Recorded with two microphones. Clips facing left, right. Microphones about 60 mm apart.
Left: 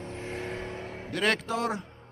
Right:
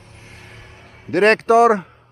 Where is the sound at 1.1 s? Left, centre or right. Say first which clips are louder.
Right 14 dB; right.